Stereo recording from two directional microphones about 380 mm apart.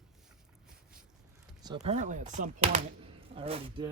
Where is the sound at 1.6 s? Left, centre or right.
Centre.